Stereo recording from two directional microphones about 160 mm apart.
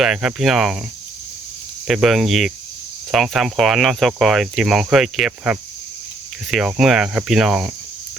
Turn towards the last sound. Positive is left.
turn(degrees=-5)  # may be behind; listen again after turning